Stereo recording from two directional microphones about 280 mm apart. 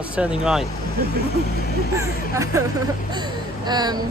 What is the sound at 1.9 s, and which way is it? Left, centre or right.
Speech, centre.